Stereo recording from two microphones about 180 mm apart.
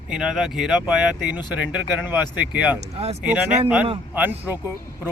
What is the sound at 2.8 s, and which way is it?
Speech, 35° right (ahead or behind).